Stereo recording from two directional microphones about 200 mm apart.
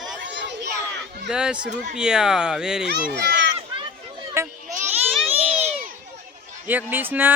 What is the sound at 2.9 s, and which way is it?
Speech, 55° right (ahead or behind).